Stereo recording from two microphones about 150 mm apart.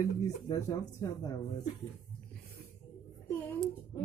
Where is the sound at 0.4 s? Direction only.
25° left (ahead or behind).